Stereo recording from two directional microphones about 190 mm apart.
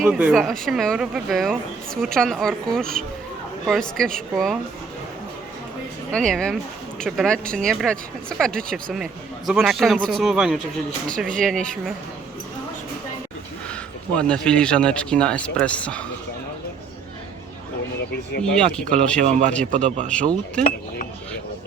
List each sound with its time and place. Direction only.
0.0 s speech: 5° right (ahead or behind)
6.1 s speech: 5° left (ahead or behind)
14.1 s speech: 5° left (ahead or behind)
18.4 s speech: 5° left (ahead or behind)
19.2 s speech: 40° right (ahead or behind)
20.1 s speech: 5° left (ahead or behind)